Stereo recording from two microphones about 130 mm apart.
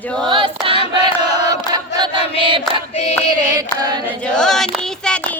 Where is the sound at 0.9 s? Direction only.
30° right (ahead or behind).